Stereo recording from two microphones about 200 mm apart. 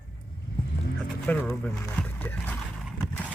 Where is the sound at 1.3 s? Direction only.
5° left (ahead or behind).